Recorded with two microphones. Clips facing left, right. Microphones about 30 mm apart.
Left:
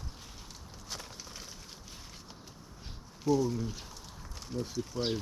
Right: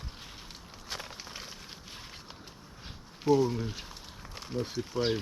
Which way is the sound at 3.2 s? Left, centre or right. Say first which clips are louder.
Right 3 dB; right.